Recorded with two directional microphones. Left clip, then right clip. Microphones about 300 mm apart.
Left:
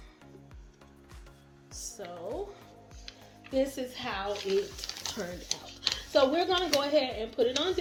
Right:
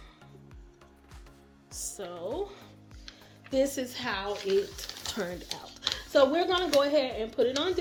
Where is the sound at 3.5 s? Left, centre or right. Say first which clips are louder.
Right 2 dB; right.